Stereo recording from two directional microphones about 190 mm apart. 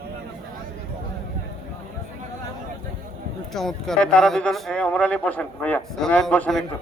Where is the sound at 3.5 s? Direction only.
Centre (ahead or behind).